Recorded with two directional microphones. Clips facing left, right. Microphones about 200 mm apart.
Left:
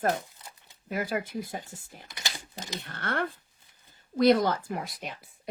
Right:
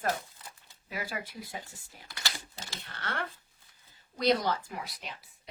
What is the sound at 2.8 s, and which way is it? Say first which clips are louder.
Speech: left 6 dB; 50° left (ahead or behind).